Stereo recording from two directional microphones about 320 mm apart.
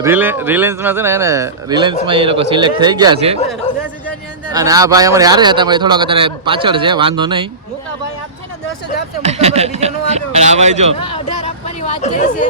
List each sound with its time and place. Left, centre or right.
0.0 s a man's voice: centre
4.5 s a man's voice: centre
9.2 s a man's voice: centre
11.0 s speech: centre